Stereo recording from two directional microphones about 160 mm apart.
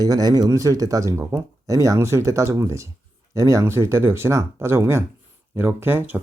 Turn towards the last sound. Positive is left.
turn(degrees=-15)  # may be behind; listen again after turning